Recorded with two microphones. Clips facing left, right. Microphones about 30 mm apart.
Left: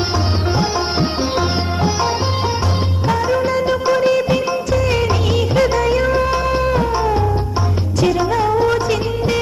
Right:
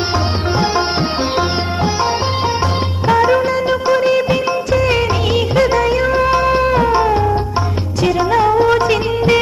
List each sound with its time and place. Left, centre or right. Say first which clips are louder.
1.4 s music: right 2 dB; centre
3.2 s music: right 6 dB; right
3.4 s music of bollywood: right 1 dB; centre
4.7 s music: right 3 dB; right
5.5 s music: right 1 dB; centre
8.0 s music of bollywood: right 3 dB; right
8.8 s music: right 4 dB; right